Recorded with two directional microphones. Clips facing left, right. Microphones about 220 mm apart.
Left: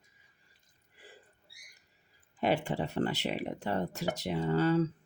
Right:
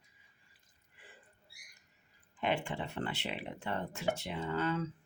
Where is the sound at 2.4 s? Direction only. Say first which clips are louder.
Left 5 dB; 40° left (ahead or behind).